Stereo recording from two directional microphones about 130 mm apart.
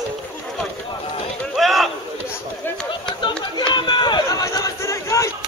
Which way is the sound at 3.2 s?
35° left (ahead or behind).